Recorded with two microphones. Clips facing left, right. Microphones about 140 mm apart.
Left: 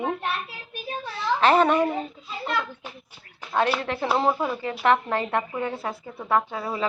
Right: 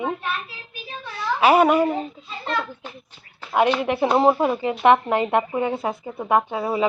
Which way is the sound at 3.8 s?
15° right (ahead or behind).